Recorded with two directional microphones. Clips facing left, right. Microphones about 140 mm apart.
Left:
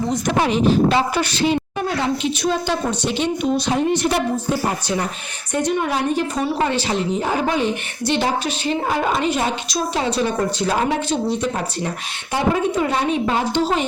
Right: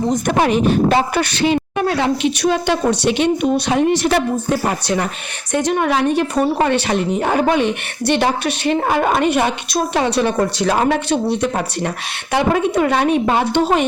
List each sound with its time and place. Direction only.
0.1 s a woman's voice: 55° right (ahead or behind)
3.7 s a woman's voice: 85° right
5.5 s a woman's voice: 90° right
6.4 s a woman's voice: 60° right (ahead or behind)